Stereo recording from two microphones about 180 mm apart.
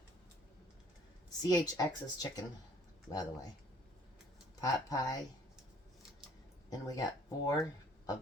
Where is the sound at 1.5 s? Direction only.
20° left (ahead or behind).